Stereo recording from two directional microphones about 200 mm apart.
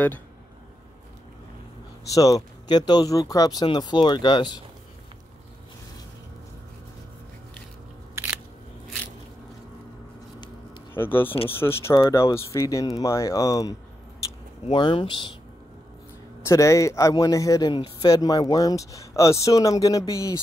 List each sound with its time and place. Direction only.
2.1 s speech: 15° left (ahead or behind)
11.0 s speech: 10° left (ahead or behind)
16.4 s speech: 15° left (ahead or behind)